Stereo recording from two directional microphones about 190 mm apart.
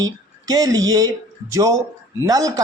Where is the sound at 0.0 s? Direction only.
20° right (ahead or behind).